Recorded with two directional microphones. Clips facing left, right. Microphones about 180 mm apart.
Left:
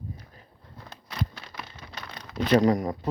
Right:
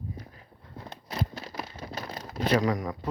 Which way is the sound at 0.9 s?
30° right (ahead or behind).